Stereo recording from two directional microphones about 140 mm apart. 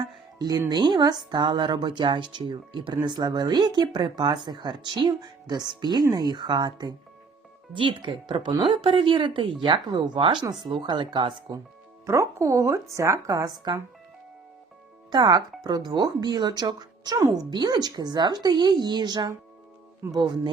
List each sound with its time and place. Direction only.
0.0 s music: 30° right (ahead or behind)
0.7 s speech: 30° right (ahead or behind)
10.4 s speech: 30° right (ahead or behind)
12.0 s speech: 20° right (ahead or behind)
15.1 s speech: 30° right (ahead or behind)